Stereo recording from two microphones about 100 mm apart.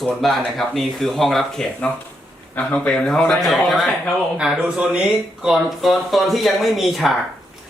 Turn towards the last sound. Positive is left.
turn(degrees=0)  # may be behind; listen again after turning